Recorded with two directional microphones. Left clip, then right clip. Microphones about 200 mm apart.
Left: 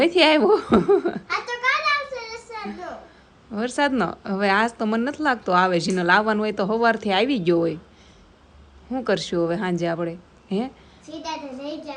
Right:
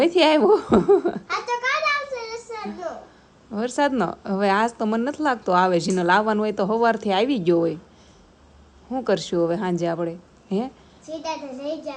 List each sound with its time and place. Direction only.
0.0 s a woman's voice: 10° right (ahead or behind)
2.1 s a sound: 10° right (ahead or behind)
3.5 s a woman's voice: 15° right (ahead or behind)
8.9 s a woman's voice: 15° right (ahead or behind)
11.2 s a child's voice: 30° right (ahead or behind)